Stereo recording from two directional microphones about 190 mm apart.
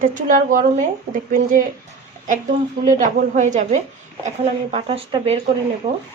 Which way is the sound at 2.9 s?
45° right (ahead or behind).